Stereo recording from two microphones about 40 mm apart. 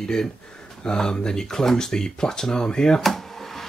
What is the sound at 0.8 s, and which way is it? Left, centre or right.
Speech, centre.